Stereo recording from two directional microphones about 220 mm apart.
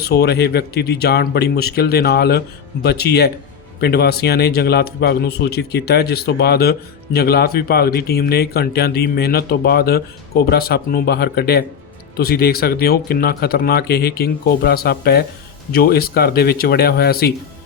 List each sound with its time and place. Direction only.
0.0 s a man's voice: 45° left (ahead or behind)